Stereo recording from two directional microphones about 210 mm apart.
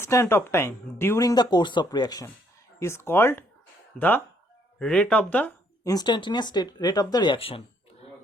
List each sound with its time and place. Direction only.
0.0 s speech: 10° left (ahead or behind)